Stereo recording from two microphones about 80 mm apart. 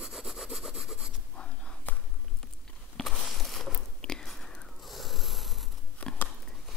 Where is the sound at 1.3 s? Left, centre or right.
Centre.